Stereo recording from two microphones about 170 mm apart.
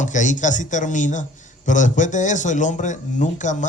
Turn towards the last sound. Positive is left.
turn(degrees=45)  # may be behind; listen again after turning